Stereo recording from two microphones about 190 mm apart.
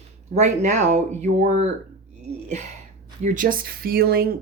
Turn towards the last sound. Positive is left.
turn(degrees=-50)  # may be behind; listen again after turning